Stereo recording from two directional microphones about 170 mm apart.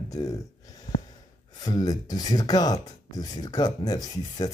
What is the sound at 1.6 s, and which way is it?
Speech, 20° left (ahead or behind).